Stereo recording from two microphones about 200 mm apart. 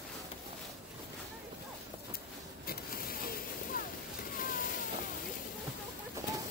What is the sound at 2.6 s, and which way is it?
Printer, 45° left (ahead or behind).